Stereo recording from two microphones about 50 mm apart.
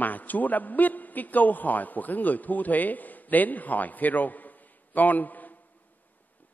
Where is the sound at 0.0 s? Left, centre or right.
Left.